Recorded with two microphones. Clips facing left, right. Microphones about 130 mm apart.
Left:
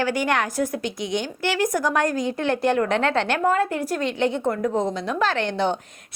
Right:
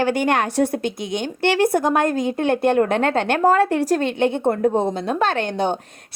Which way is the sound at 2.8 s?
45° right (ahead or behind).